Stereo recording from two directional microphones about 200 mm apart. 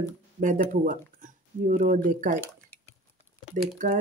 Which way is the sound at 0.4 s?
40° right (ahead or behind).